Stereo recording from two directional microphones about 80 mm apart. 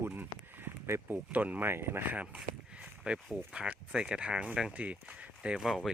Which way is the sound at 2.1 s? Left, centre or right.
Centre.